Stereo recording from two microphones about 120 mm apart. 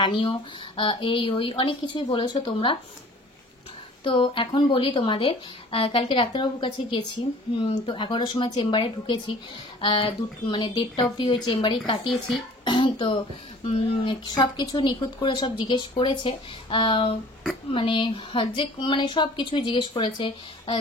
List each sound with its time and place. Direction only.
0.0 s speech: 40° left (ahead or behind)
4.0 s speech: 45° left (ahead or behind)
13.7 s speech: 50° left (ahead or behind)
14.2 s speech: 35° left (ahead or behind)